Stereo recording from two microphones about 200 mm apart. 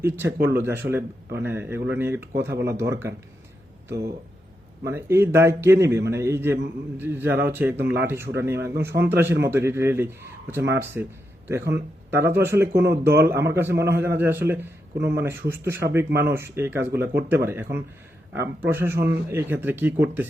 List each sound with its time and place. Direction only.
0.0 s a man's voice: 10° right (ahead or behind)
4.9 s a man's voice: 10° right (ahead or behind)
14.9 s speech: 55° right (ahead or behind)
15.2 s a man's voice: 10° right (ahead or behind)
16.0 s speech: 55° right (ahead or behind)
16.3 s a man's voice: 10° right (ahead or behind)